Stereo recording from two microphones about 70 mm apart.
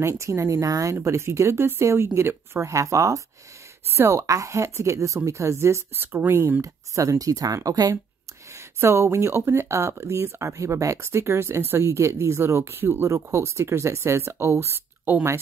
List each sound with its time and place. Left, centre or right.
0.0 s a woman's voice: right
1.0 s speech: right
2.7 s a woman's voice: right
6.6 s speech: right
8.5 s speech: right